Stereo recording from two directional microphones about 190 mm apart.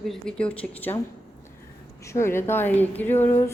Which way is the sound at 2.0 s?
15° left (ahead or behind).